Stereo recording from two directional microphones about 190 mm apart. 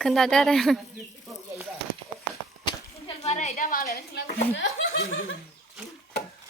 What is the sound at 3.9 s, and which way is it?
Speech, 60° left (ahead or behind).